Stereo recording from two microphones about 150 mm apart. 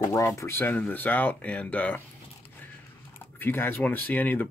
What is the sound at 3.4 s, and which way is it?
Speech, 15° left (ahead or behind).